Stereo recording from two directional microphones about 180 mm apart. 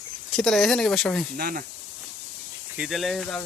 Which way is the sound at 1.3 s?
55° right (ahead or behind).